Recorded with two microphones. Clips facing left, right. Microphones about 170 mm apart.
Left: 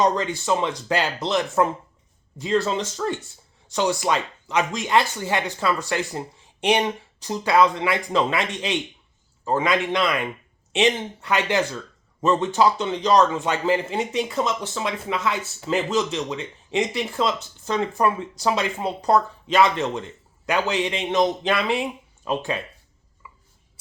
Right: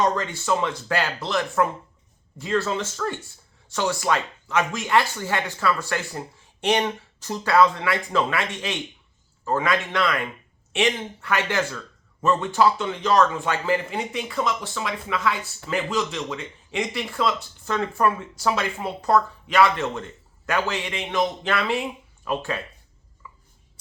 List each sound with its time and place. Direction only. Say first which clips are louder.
0.0 s a man's voice: left 2 dB; 20° left (ahead or behind)
23.2 s chopping: right 1 dB; 15° left (ahead or behind)